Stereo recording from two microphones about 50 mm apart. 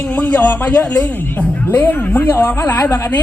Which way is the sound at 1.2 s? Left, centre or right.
Left.